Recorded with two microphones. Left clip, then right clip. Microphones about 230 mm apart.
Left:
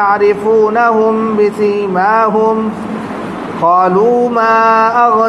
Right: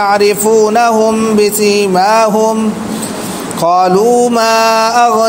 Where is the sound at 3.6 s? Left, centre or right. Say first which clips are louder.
Even; right.